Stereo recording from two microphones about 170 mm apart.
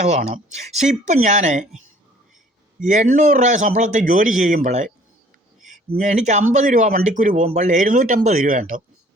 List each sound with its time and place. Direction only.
0.0 s speech: 40° right (ahead or behind)
2.8 s speech: 45° right (ahead or behind)